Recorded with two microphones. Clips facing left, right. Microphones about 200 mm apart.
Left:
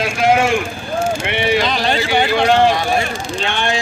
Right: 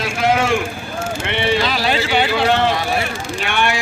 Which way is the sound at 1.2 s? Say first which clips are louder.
Left 1 dB; 15° left (ahead or behind).